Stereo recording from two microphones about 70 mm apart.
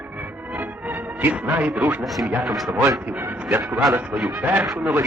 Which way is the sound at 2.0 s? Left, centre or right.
Centre.